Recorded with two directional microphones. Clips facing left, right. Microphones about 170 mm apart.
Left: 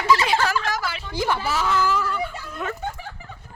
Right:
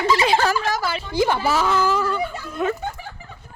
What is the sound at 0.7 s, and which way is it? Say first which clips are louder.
Speech: right 4 dB; 35° right (ahead or behind).